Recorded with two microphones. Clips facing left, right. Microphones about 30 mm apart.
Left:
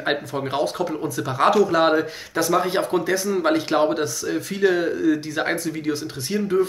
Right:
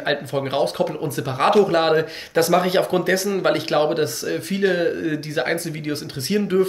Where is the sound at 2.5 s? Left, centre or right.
Right.